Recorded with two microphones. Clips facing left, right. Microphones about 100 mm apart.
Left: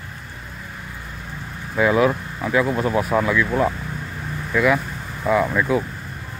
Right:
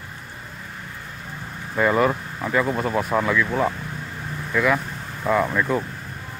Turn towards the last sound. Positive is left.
turn(degrees=5)  # may be behind; listen again after turning